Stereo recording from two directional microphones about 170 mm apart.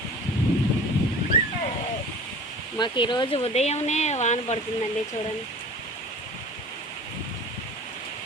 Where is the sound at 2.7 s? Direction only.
25° left (ahead or behind).